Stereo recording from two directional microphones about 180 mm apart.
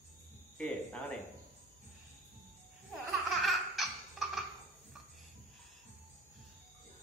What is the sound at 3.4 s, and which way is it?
Laughter, centre (ahead or behind).